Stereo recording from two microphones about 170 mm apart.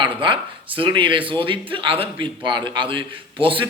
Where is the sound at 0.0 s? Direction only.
30° right (ahead or behind).